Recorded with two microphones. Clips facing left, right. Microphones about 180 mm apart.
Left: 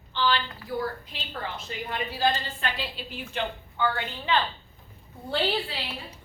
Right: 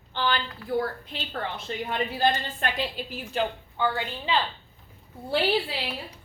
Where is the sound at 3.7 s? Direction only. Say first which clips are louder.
Left 2 dB; 15° right (ahead or behind).